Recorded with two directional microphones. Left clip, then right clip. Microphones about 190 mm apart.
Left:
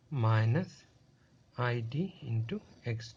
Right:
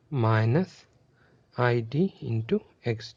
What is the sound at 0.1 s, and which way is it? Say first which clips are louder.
Speech: right 8 dB; 40° right (ahead or behind).